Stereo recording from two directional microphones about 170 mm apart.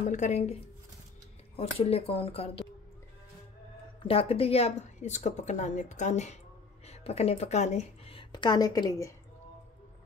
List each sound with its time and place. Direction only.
0.0 s a woman's voice: 45° left (ahead or behind)
1.6 s speech: 35° left (ahead or behind)
4.0 s a woman's voice: 35° left (ahead or behind)